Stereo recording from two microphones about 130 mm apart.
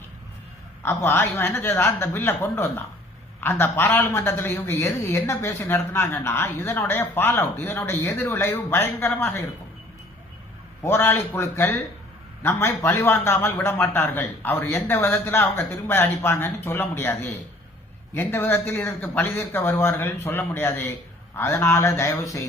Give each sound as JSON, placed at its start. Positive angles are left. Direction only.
{"t": 0.8, "sound": "a man's voice", "side_deg": 20}
{"t": 10.8, "sound": "a man's voice", "side_deg": 20}